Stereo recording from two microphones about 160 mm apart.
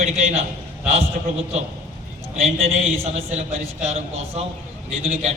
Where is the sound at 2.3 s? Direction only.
40° right (ahead or behind).